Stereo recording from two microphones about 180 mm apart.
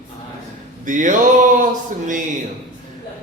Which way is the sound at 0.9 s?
45° right (ahead or behind).